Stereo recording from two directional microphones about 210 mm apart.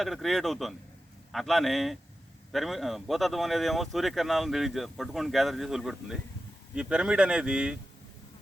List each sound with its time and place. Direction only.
0.0 s speech: centre (ahead or behind)